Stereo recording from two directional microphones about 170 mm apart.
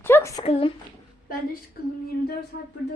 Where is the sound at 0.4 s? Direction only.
35° left (ahead or behind).